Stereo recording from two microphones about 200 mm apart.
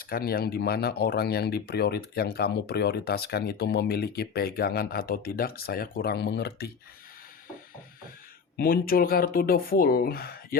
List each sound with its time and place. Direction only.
0.0 s speech: 50° left (ahead or behind)
8.5 s speech: 45° left (ahead or behind)